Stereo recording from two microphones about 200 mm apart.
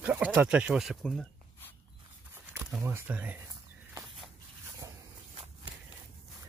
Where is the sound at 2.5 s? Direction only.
10° right (ahead or behind).